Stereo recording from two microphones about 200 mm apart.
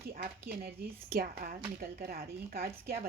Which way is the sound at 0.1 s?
50° right (ahead or behind).